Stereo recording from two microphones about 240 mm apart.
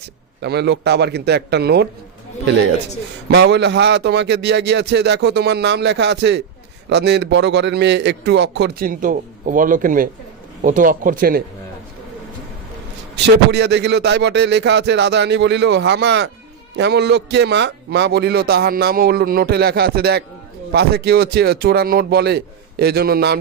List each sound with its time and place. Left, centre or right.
0.4 s a man's voice: right
3.2 s a man's voice: right
13.1 s a man's voice: right